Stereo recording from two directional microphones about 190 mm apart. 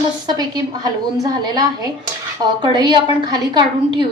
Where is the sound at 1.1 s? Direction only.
20° right (ahead or behind).